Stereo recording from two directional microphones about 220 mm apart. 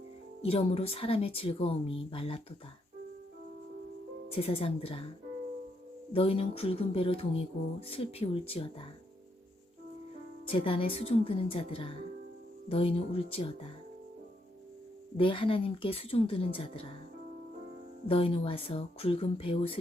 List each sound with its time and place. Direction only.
0.4 s speech: 25° left (ahead or behind)
4.4 s speech: 25° left (ahead or behind)
6.1 s speech: 25° left (ahead or behind)
10.5 s speech: 25° left (ahead or behind)
15.2 s speech: 25° left (ahead or behind)
18.1 s speech: 25° left (ahead or behind)